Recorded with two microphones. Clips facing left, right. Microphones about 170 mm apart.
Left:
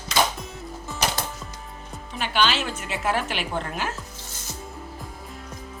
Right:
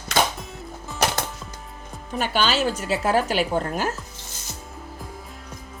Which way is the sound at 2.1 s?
45° right (ahead or behind).